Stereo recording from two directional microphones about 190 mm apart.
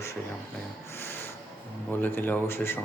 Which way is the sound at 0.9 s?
10° left (ahead or behind).